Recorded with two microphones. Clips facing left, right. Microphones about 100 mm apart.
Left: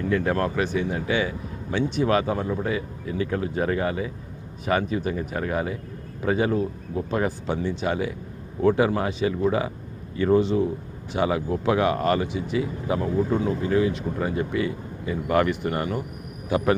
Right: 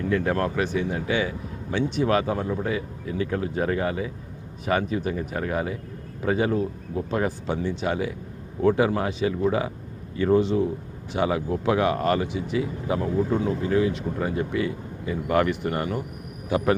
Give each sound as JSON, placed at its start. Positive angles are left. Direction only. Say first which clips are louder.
{"t": 0.0, "sound": "a man's voice", "louder": "even", "side_deg": 30}